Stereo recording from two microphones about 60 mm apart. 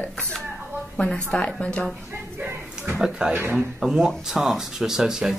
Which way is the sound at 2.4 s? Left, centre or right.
Right.